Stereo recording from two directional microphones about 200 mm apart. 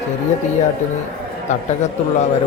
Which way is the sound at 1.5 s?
35° left (ahead or behind).